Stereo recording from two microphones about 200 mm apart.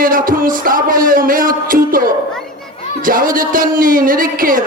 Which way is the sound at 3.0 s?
45° right (ahead or behind).